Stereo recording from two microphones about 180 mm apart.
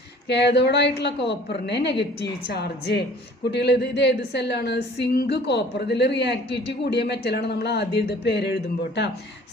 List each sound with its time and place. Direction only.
0.3 s speech: 70° left (ahead or behind)